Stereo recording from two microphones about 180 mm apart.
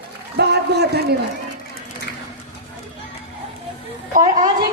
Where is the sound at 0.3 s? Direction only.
65° right (ahead or behind).